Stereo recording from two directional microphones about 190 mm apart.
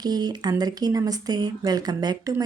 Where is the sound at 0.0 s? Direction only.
20° right (ahead or behind).